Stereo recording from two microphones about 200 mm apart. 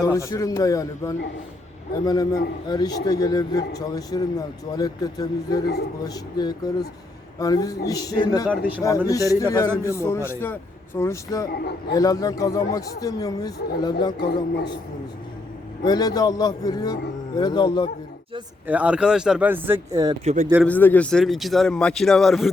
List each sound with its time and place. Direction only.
0.0 s a man's voice: 15° left (ahead or behind)
11.5 s a man's voice: 55° left (ahead or behind)
11.9 s speech: 15° left (ahead or behind)
15.8 s a man's voice: 20° left (ahead or behind)
18.7 s speech: 5° right (ahead or behind)
20.2 s a man's voice: 35° right (ahead or behind)
20.7 s speech: 10° left (ahead or behind)